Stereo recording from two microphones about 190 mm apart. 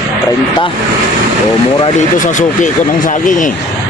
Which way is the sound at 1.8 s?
40° left (ahead or behind).